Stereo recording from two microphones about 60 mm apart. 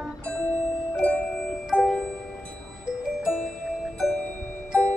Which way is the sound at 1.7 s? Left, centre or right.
Left.